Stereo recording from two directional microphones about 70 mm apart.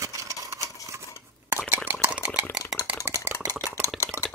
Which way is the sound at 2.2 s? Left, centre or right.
Centre.